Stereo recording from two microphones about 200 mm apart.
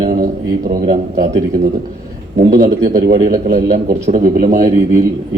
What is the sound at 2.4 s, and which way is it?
A man's voice, 45° right (ahead or behind).